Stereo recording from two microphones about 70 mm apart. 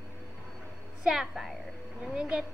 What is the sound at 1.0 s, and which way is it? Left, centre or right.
A woman's voice, centre.